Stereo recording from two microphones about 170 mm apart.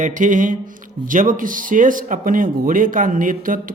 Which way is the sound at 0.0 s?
50° right (ahead or behind).